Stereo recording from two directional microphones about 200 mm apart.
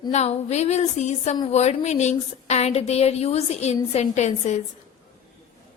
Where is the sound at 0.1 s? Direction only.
35° left (ahead or behind).